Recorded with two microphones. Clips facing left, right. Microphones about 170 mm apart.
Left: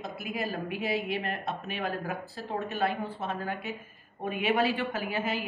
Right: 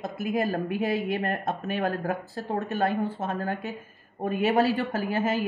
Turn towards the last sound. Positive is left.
turn(degrees=-45)  # may be behind; listen again after turning